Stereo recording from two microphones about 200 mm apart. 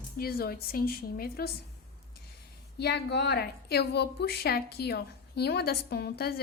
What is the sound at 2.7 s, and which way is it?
A woman's voice, 55° left (ahead or behind).